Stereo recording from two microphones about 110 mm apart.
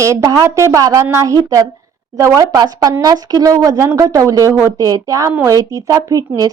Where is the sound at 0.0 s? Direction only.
30° right (ahead or behind).